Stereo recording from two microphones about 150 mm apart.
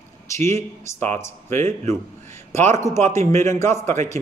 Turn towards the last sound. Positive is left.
turn(degrees=15)  # may be behind; listen again after turning